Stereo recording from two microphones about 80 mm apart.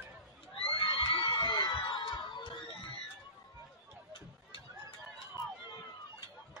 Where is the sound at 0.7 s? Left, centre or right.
Left.